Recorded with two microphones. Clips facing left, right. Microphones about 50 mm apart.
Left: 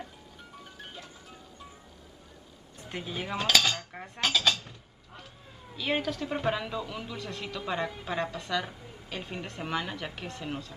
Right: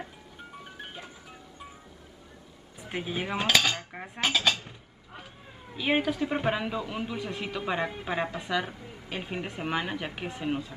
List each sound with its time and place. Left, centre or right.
0.7 s music: right
2.8 s cutlery: centre
8.8 s speech: right